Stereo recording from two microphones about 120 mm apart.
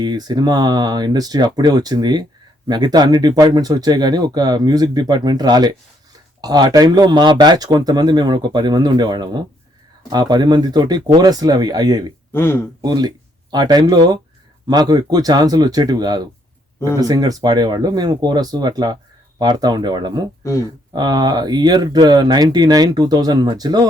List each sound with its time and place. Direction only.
0.0 s speech: 35° right (ahead or behind)
12.3 s speech: 20° left (ahead or behind)
12.8 s speech: 35° right (ahead or behind)
20.4 s speech: 25° left (ahead or behind)
20.9 s speech: 35° right (ahead or behind)